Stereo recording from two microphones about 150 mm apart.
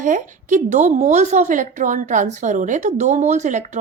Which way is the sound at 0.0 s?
60° right (ahead or behind).